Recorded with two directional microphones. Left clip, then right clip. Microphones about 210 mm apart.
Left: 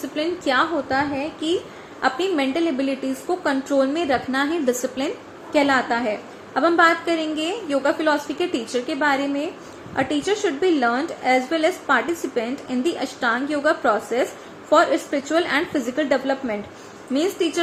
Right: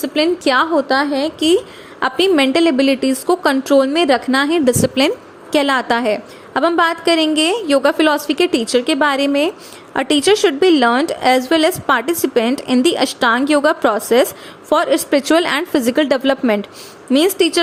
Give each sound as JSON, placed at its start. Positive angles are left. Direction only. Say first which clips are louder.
{"t": 0.1, "sound": "a woman's voice", "louder": "right 7 dB", "side_deg": -50}